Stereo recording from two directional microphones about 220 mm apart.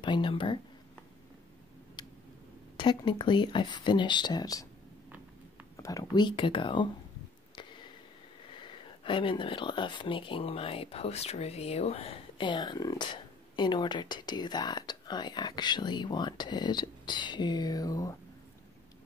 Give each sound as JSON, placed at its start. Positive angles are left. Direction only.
{"t": 0.0, "sound": "speech", "side_deg": 20}
{"t": 2.0, "sound": "tick", "side_deg": 20}
{"t": 2.8, "sound": "speech", "side_deg": 20}
{"t": 5.8, "sound": "speech", "side_deg": 15}
{"t": 7.5, "sound": "a sound", "side_deg": 20}
{"t": 8.5, "sound": "speech", "side_deg": 20}